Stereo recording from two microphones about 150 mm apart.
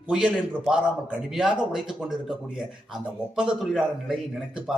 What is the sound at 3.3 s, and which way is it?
Speech, 5° right (ahead or behind).